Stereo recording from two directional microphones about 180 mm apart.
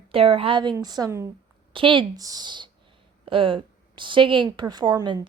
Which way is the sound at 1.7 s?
30° right (ahead or behind).